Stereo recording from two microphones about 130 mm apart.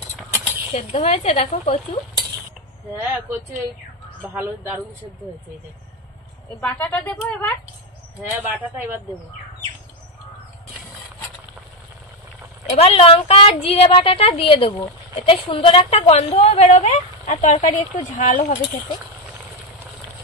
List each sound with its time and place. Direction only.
0.3 s a sound: 15° right (ahead or behind)
0.7 s a woman's voice: 55° left (ahead or behind)
2.9 s speech: 15° right (ahead or behind)
4.3 s speech: 15° right (ahead or behind)
6.6 s speech: 10° left (ahead or behind)
8.2 s speech: 15° right (ahead or behind)
12.7 s a woman's voice: 50° left (ahead or behind); by 18.6 s 70° left (ahead or behind)